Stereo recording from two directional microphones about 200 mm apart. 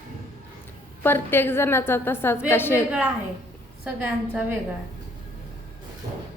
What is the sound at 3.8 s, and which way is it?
Speech, 10° right (ahead or behind).